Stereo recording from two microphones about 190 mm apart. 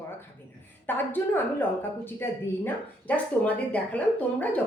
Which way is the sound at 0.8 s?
10° left (ahead or behind).